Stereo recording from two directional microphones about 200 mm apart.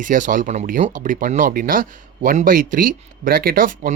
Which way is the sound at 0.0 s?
40° right (ahead or behind).